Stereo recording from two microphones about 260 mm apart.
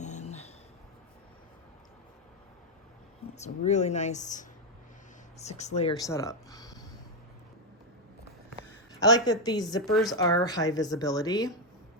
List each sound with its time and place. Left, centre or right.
0.0 s a sound: left
3.3 s speech: left
6.1 s a woman's voice: centre
8.9 s a woman's voice: centre
9.8 s speech: centre
10.2 s a woman's voice: centre